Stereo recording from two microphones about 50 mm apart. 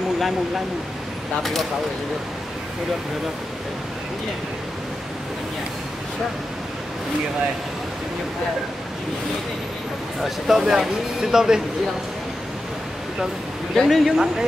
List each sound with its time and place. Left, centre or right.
1.4 s speech: centre
10.2 s speech: centre
13.7 s speech: centre